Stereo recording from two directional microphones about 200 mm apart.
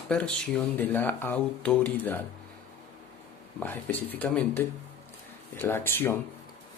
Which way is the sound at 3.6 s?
10° left (ahead or behind).